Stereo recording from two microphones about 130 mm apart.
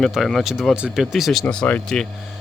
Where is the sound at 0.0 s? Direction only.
Centre (ahead or behind).